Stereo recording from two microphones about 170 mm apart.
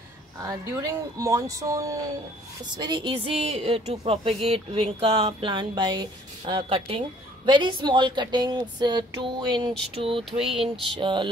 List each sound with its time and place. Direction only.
0.4 s a woman's voice: 20° right (ahead or behind)
10.4 s a sound: 5° right (ahead or behind)
10.9 s a woman's voice: 30° right (ahead or behind)